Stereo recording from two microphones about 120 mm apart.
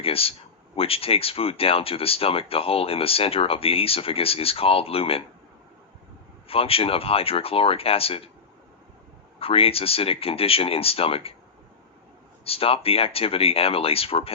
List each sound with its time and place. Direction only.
0.0 s speech: 55° left (ahead or behind)
6.5 s speech: 50° left (ahead or behind)
9.4 s speech: 55° left (ahead or behind)
12.5 s speech: 50° left (ahead or behind)